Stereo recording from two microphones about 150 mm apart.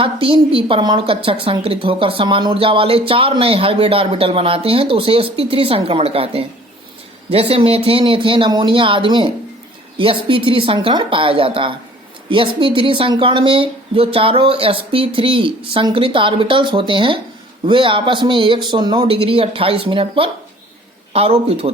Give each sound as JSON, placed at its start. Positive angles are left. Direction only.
{"t": 0.0, "sound": "a woman's voice", "side_deg": -35}